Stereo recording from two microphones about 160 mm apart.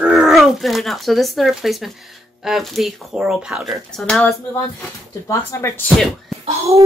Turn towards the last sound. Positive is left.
turn(degrees=-40)  # may be behind; listen again after turning